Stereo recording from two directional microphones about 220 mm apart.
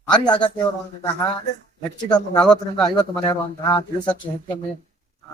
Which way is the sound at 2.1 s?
20° left (ahead or behind).